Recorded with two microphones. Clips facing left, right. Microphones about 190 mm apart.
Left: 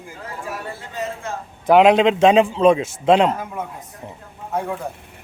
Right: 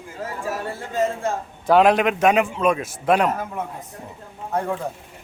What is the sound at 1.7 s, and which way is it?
A man's voice, 20° left (ahead or behind).